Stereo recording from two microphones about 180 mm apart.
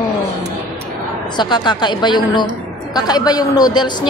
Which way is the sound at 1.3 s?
25° left (ahead or behind).